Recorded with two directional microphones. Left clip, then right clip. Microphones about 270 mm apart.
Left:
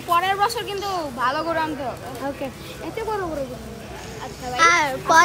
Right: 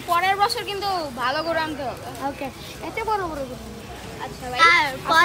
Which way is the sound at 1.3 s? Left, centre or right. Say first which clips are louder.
Even; centre.